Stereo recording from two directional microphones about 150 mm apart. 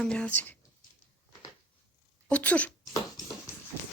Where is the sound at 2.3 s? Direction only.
10° left (ahead or behind).